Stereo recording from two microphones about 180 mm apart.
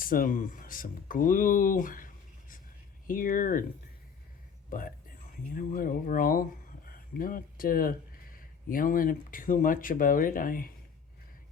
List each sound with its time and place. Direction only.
0.0 s speech: 50° left (ahead or behind)
4.7 s speech: 50° left (ahead or behind)